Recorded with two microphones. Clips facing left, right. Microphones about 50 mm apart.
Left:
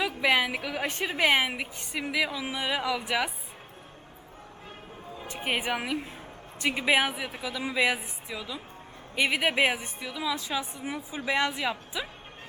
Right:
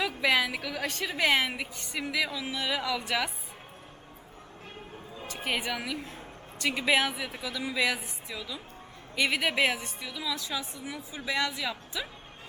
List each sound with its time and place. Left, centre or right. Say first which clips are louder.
0.0 s a woman's voice: left 1 dB; centre
5.3 s a woman's voice: left 2 dB; left